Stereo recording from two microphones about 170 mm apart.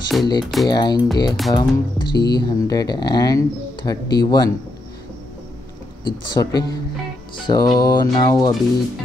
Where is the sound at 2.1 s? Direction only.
70° left (ahead or behind).